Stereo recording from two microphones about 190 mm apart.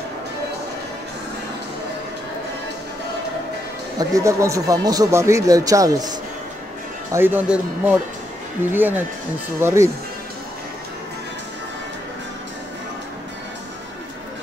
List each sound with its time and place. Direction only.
4.0 s speech: 15° right (ahead or behind)